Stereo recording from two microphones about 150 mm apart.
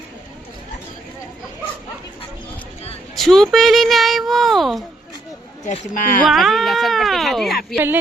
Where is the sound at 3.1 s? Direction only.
Centre (ahead or behind).